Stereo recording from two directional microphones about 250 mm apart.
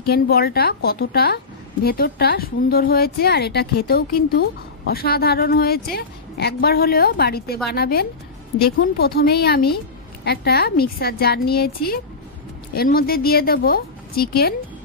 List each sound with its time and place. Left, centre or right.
0.0 s a woman's voice: left